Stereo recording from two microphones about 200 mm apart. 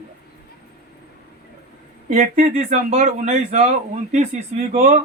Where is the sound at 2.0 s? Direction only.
40° right (ahead or behind).